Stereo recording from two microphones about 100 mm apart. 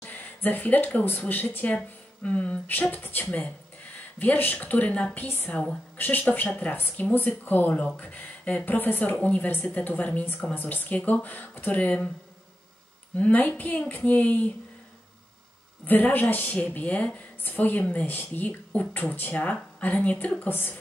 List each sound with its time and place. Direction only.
0.0 s a woman's voice: 15° left (ahead or behind)
13.1 s a woman's voice: 15° left (ahead or behind)
15.9 s a woman's voice: 20° left (ahead or behind)